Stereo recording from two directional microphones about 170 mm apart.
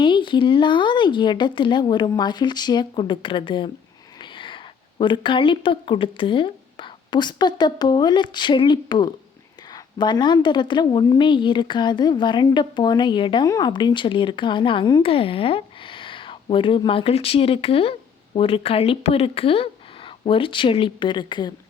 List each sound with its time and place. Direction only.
0.0 s a woman's voice: 30° left (ahead or behind)